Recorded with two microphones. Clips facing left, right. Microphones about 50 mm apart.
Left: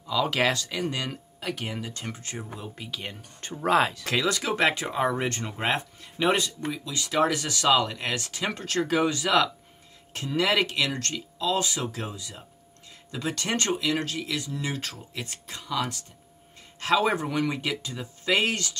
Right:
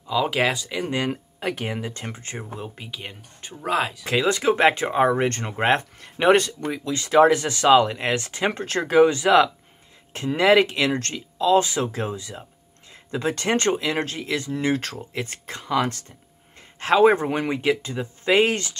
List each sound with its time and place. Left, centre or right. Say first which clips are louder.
0.0 s speech: right 3 dB; centre
0.9 s speech: right 7 dB; right
2.8 s speech: even; centre
4.0 s speech: right 5 dB; right